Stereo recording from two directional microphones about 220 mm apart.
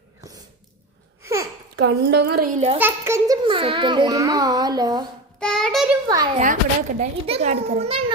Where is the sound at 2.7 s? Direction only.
10° right (ahead or behind).